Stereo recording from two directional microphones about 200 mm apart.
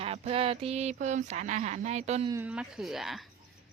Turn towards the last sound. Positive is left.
turn(degrees=0)  # may be behind; listen again after turning